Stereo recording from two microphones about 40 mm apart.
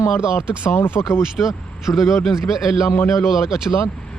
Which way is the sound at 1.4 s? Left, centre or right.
Left.